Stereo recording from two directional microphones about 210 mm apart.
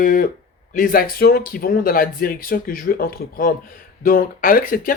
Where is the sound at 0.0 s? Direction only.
40° left (ahead or behind).